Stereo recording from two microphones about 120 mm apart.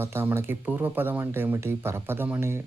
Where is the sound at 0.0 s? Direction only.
20° right (ahead or behind).